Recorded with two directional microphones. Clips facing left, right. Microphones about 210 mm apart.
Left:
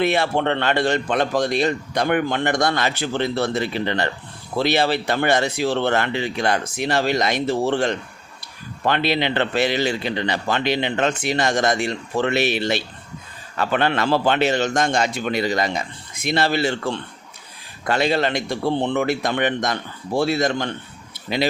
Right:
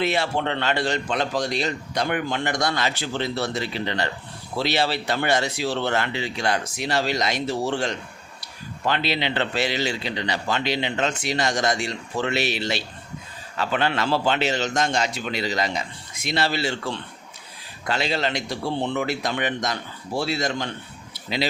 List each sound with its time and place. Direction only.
0.0 s a man's voice: 55° left (ahead or behind)